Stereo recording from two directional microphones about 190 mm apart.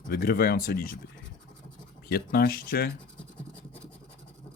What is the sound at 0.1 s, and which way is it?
Speech, 50° left (ahead or behind).